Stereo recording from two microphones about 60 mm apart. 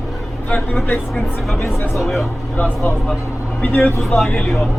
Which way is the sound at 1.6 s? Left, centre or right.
Left.